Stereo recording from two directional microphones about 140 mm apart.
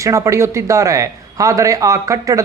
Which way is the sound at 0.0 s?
20° right (ahead or behind).